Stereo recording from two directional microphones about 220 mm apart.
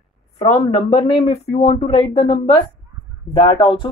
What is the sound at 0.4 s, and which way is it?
Speech, 30° left (ahead or behind).